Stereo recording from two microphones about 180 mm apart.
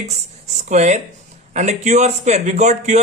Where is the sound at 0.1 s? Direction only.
40° right (ahead or behind).